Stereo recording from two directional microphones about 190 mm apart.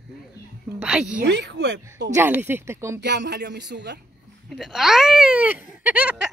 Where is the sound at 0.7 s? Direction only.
5° right (ahead or behind).